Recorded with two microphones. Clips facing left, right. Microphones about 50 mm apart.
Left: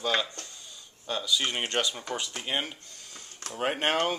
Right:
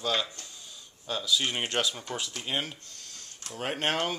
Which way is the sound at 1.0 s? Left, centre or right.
Centre.